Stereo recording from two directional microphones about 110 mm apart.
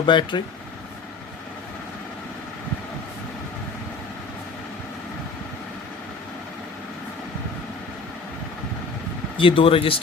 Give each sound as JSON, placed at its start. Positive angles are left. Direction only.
{"t": 0.0, "sound": "speech", "side_deg": 45}
{"t": 9.4, "sound": "speech", "side_deg": 50}